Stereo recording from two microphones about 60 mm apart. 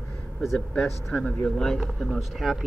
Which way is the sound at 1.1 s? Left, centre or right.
Left.